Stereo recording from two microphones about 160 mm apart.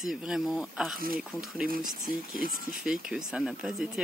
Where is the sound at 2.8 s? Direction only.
5° right (ahead or behind).